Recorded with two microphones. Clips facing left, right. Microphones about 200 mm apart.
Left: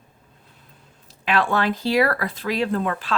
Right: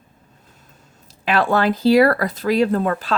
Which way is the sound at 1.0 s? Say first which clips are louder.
Right 3 dB; 40° right (ahead or behind).